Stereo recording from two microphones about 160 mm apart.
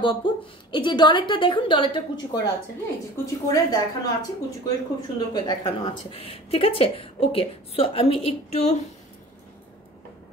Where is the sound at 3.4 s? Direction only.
25° left (ahead or behind).